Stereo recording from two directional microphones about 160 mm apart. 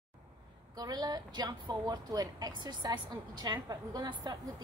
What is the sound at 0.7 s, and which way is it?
A woman's voice, 25° right (ahead or behind).